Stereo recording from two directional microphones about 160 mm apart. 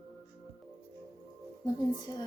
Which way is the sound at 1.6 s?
25° left (ahead or behind).